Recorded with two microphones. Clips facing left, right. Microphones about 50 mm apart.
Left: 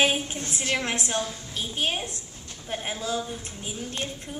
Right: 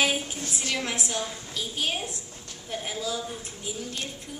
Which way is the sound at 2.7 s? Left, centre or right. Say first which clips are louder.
Left 2 dB; left.